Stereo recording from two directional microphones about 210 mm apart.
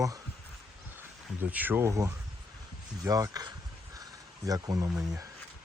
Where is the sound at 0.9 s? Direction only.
10° right (ahead or behind).